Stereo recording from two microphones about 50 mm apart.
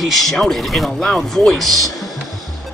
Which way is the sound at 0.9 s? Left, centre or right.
Centre.